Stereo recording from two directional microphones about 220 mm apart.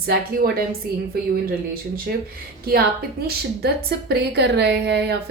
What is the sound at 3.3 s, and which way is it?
A woman's voice, 45° right (ahead or behind).